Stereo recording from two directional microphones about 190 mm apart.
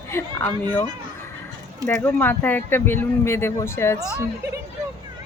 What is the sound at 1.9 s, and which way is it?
A woman's voice, 10° left (ahead or behind).